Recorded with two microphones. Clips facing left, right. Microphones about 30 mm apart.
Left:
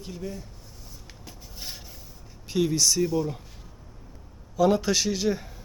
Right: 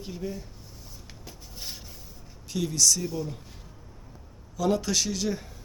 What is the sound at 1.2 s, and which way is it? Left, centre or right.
Rub, centre.